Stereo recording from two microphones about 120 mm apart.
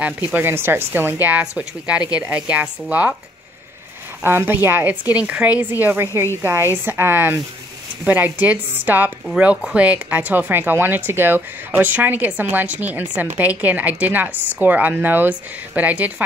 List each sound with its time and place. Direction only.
0.0 s speech: 15° right (ahead or behind)
4.2 s speech: 20° right (ahead or behind)